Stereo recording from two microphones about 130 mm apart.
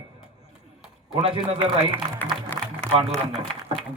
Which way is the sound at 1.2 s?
40° right (ahead or behind).